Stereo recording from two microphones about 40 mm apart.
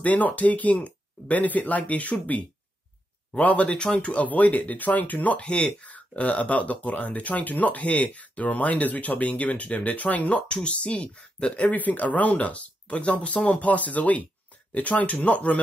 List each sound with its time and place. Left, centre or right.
0.0 s speech: left
3.3 s speech: left
3.6 s speech: left
4.0 s speech: left
10.5 s speech: left
11.7 s speech: left